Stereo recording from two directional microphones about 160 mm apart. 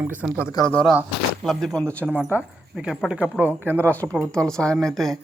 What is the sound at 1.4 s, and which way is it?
Speech, centre (ahead or behind).